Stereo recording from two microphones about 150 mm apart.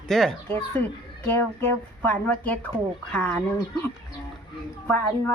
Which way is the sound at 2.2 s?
10° left (ahead or behind).